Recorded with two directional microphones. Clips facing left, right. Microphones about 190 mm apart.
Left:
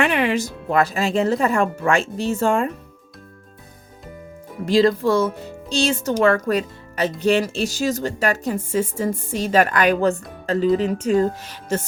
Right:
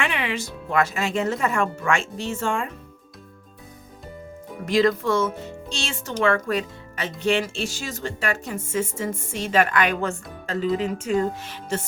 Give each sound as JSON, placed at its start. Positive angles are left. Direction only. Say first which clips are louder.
{"t": 0.0, "sound": "speech", "louder": "left 7 dB", "side_deg": 45}
{"t": 4.6, "sound": "speech", "louder": "left 4 dB", "side_deg": 30}